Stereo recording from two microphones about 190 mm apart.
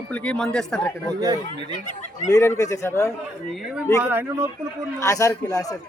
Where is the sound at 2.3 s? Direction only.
15° left (ahead or behind).